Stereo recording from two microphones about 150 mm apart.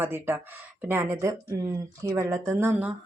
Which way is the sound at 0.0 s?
15° right (ahead or behind).